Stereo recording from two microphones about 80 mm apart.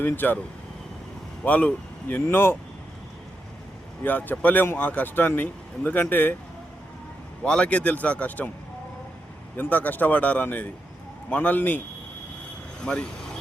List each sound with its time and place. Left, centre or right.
0.0 s speech: left
1.5 s speech: centre
4.0 s speech: left
7.4 s speech: centre
9.6 s speech: left
12.8 s speech: centre